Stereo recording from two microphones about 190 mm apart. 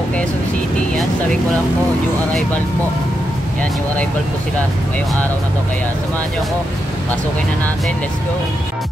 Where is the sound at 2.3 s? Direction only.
10° left (ahead or behind).